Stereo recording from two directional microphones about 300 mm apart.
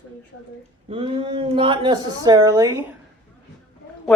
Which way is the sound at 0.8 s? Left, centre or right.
Centre.